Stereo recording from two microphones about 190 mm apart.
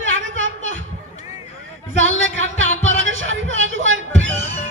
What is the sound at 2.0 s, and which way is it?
Music, 90° right.